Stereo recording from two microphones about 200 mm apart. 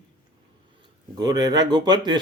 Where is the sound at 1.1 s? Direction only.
20° right (ahead or behind).